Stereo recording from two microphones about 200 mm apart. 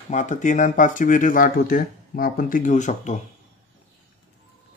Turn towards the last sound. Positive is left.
turn(degrees=35)  # may be behind; listen again after turning